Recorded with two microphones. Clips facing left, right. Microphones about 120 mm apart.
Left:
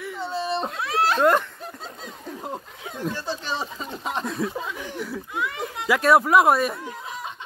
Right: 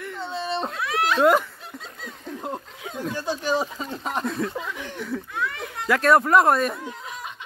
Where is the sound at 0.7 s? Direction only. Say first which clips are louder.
Left 1 dB; 30° left (ahead or behind).